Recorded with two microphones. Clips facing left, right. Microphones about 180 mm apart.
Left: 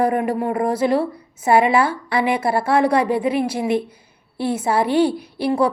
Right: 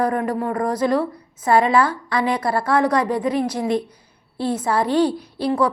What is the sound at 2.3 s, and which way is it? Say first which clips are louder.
Speech: left 2 dB; 25° left (ahead or behind).